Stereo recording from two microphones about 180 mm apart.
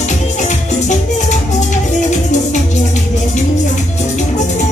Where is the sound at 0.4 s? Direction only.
40° left (ahead or behind).